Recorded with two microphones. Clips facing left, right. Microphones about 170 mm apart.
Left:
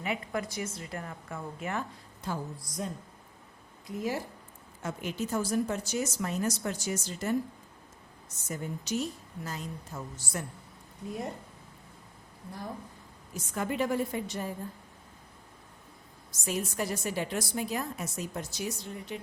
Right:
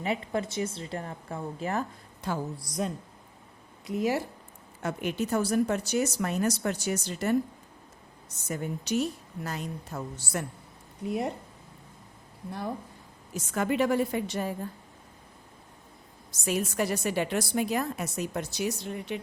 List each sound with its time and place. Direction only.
0.0 s a woman's voice: 30° right (ahead or behind)
2.2 s a woman's voice: 75° right (ahead or behind)
4.8 s speech: 65° right (ahead or behind)
8.4 s speech: 65° right (ahead or behind)
13.3 s a woman's voice: 80° right
16.5 s a woman's voice: 70° right (ahead or behind)